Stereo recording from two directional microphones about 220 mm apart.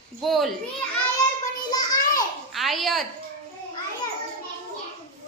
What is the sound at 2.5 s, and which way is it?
Speech, centre (ahead or behind).